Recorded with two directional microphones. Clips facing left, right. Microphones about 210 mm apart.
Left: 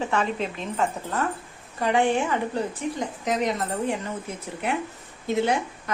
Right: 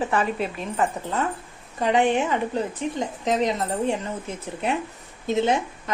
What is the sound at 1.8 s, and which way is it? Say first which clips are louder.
Speech: right 2 dB; 20° right (ahead or behind).